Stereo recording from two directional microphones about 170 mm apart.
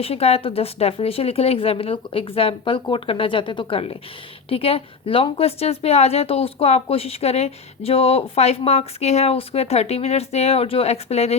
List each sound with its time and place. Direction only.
0.0 s a woman's voice: 35° left (ahead or behind)